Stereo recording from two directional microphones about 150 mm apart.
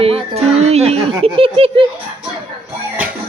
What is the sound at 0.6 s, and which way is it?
A child's voice, 45° right (ahead or behind).